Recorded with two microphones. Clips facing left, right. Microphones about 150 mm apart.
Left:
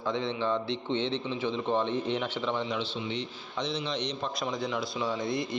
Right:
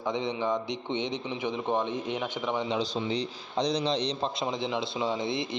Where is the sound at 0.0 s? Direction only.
15° right (ahead or behind).